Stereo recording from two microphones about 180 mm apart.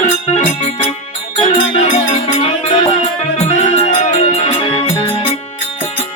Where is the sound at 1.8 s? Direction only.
40° left (ahead or behind).